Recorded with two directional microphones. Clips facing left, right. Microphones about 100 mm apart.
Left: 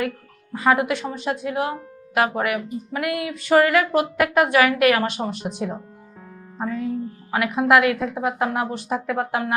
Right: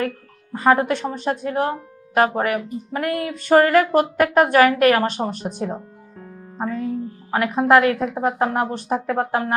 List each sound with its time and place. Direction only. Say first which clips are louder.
0.5 s speech: right 2 dB; 40° right (ahead or behind)
7.3 s speech: right 2 dB; 35° right (ahead or behind)